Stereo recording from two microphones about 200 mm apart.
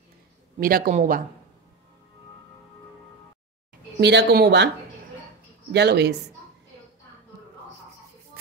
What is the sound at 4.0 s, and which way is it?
Speech, 60° right (ahead or behind).